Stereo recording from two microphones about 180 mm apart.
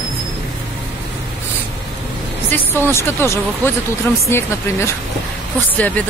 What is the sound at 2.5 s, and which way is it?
Speech, 15° left (ahead or behind).